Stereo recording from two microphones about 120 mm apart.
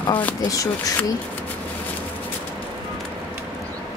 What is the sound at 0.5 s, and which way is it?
Speech, 30° left (ahead or behind).